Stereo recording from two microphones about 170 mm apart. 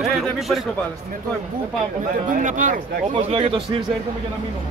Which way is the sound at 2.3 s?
50° right (ahead or behind).